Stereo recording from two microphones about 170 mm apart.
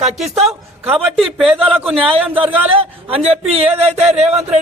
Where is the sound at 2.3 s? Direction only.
30° right (ahead or behind).